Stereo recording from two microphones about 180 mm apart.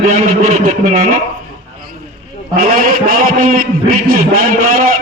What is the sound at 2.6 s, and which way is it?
A man's voice, 50° right (ahead or behind).